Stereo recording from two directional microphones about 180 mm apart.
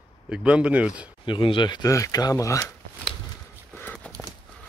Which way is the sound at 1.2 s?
25° left (ahead or behind).